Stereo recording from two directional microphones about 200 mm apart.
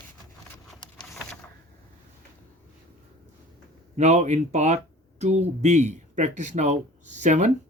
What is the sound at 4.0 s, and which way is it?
Speech, 35° right (ahead or behind).